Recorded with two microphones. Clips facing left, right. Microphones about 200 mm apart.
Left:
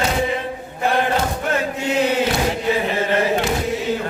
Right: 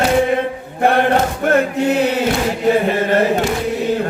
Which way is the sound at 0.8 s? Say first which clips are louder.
Right 5 dB; 60° right (ahead or behind).